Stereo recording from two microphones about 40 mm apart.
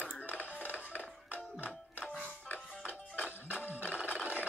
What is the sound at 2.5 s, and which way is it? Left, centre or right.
Music, left.